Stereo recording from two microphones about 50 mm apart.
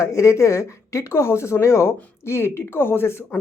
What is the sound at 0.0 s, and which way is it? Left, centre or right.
Speech, left.